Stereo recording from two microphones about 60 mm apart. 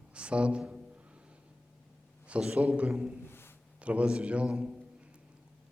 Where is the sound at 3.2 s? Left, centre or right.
Left.